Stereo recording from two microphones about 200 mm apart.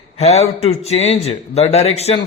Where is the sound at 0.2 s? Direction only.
30° left (ahead or behind).